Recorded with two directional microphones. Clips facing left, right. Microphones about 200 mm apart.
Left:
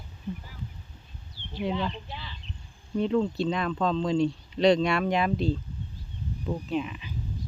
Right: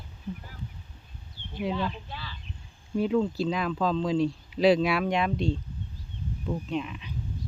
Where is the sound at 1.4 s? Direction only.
15° right (ahead or behind).